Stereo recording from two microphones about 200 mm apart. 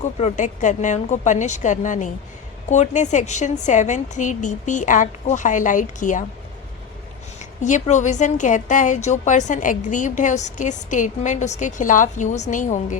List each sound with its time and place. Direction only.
0.0 s a woman's voice: 35° left (ahead or behind)
7.3 s a woman's voice: 35° left (ahead or behind)